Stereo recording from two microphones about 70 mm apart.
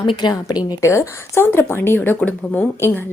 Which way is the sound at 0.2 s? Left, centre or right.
Left.